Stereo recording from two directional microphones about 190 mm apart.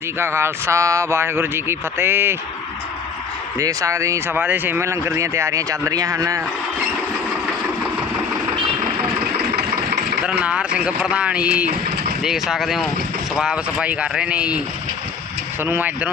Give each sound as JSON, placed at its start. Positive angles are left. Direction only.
{"t": 0.2, "sound": "speech", "side_deg": -15}
{"t": 3.6, "sound": "speech", "side_deg": -15}
{"t": 9.4, "sound": "engine", "side_deg": -60}
{"t": 10.4, "sound": "speech", "side_deg": -5}
{"t": 15.6, "sound": "speech", "side_deg": -10}